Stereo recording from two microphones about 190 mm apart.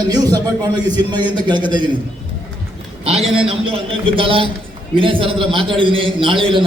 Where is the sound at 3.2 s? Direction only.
30° right (ahead or behind).